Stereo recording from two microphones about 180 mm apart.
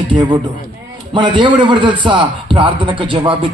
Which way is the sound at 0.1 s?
25° right (ahead or behind).